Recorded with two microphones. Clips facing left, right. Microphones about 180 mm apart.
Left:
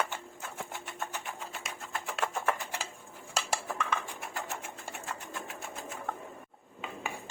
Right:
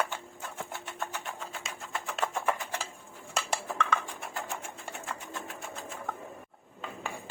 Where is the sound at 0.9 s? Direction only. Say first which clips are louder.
Right 1 dB; 10° left (ahead or behind).